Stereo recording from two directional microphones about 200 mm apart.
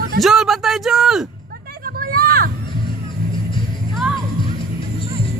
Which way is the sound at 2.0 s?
50° right (ahead or behind).